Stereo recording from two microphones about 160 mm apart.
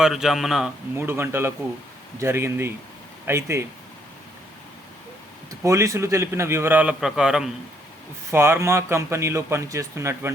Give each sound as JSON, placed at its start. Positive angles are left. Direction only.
{"t": 0.0, "sound": "speech", "side_deg": 0}
{"t": 0.9, "sound": "speech", "side_deg": -15}
{"t": 5.6, "sound": "speech", "side_deg": -20}
{"t": 8.3, "sound": "speech", "side_deg": -15}